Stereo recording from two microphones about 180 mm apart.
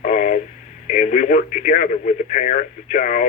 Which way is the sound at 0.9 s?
45° left (ahead or behind).